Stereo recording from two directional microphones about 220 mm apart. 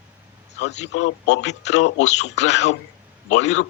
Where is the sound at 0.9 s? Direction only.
55° left (ahead or behind).